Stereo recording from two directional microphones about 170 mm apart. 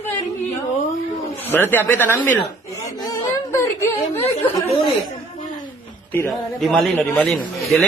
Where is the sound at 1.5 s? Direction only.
10° left (ahead or behind).